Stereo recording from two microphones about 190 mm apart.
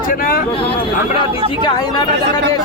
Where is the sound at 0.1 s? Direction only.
50° left (ahead or behind).